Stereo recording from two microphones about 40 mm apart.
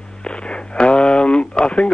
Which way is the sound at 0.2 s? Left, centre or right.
Left.